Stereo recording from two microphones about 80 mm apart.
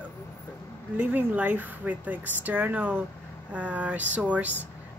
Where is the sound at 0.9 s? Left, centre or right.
Right.